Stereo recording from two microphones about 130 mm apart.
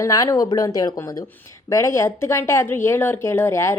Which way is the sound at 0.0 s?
25° left (ahead or behind).